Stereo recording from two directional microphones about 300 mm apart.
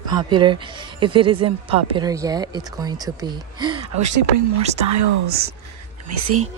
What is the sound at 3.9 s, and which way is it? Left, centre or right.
Speech, right.